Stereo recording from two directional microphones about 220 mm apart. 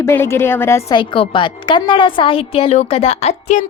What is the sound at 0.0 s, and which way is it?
A woman's voice, 10° left (ahead or behind).